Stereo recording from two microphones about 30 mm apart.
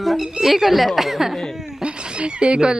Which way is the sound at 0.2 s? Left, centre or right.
Centre.